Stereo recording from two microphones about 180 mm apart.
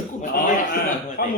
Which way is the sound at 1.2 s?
60° left (ahead or behind).